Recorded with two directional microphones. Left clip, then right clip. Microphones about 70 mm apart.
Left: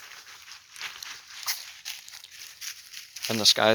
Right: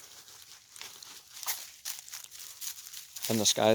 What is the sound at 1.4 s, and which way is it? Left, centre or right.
Walk, right.